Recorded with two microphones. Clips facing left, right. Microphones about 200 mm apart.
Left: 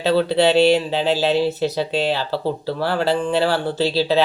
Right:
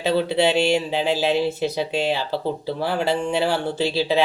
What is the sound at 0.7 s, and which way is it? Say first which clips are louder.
Speech: left 3 dB; 15° right (ahead or behind).